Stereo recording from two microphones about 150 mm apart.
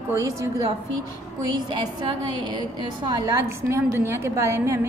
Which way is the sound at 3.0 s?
25° right (ahead or behind).